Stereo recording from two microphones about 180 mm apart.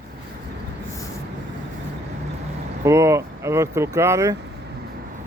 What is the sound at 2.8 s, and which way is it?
Speech, 15° right (ahead or behind).